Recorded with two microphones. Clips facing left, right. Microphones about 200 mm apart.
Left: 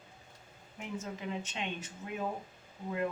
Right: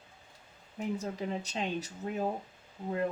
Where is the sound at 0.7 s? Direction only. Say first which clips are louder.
Right 6 dB; 35° right (ahead or behind).